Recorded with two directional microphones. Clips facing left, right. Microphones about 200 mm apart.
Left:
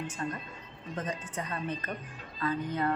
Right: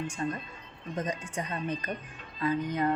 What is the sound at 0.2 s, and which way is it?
A woman's voice, 20° right (ahead or behind).